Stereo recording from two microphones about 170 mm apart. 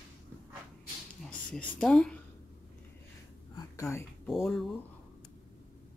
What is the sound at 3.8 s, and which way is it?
Speech, 15° left (ahead or behind).